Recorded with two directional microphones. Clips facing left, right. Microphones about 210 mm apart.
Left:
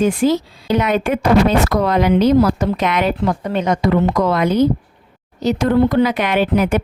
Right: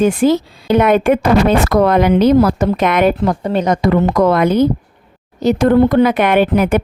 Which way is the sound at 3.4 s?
40° right (ahead or behind).